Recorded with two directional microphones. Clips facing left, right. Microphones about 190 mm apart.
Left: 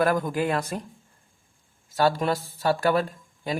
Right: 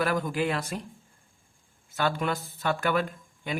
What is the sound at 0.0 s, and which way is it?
Speech, 50° left (ahead or behind).